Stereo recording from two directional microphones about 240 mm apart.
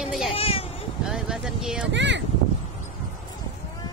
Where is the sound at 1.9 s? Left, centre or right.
Right.